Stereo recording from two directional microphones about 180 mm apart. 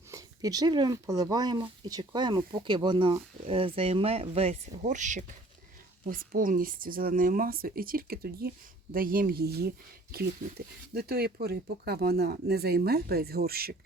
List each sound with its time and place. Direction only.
0.1 s speech: 20° right (ahead or behind); by 13.7 s 60° right (ahead or behind)